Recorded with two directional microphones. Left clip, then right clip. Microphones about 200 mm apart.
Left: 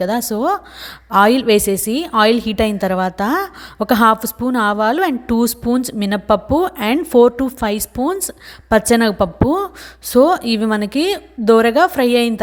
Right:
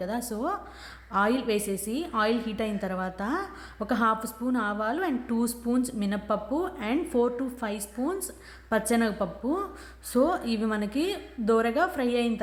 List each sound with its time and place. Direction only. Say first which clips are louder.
0.0 s a woman's voice: left 13 dB; 40° left (ahead or behind)